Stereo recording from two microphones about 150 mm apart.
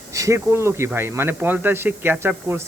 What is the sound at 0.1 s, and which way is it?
A man's voice, 20° right (ahead or behind).